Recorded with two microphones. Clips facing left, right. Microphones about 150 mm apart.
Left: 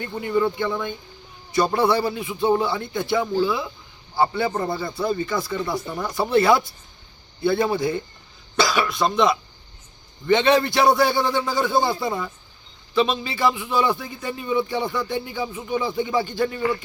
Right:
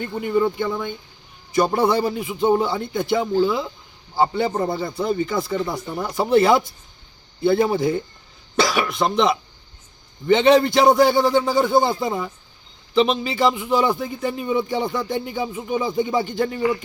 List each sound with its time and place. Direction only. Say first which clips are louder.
0.0 s a man's voice: right 2 dB; 20° right (ahead or behind)
7.4 s a man's voice: right 3 dB; 20° right (ahead or behind)